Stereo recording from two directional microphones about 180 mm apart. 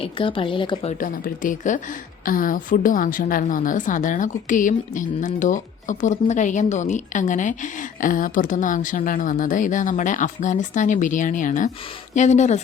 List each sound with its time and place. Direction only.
0.0 s a woman's voice: 30° left (ahead or behind)
0.9 s a woman's voice: 50° left (ahead or behind)